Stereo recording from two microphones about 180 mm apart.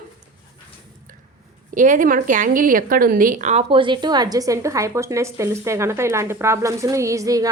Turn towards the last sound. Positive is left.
turn(degrees=-20)  # may be behind; listen again after turning